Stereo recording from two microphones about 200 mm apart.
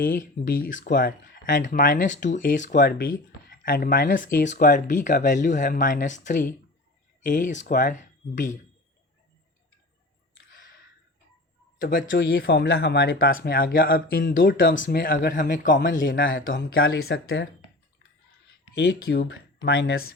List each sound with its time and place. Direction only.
0.0 s speech: 45° left (ahead or behind)
11.8 s speech: 45° left (ahead or behind); by 17.5 s 60° left (ahead or behind)
18.7 s speech: 55° left (ahead or behind)